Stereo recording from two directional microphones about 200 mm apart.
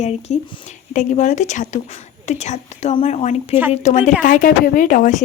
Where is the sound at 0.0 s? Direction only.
35° left (ahead or behind).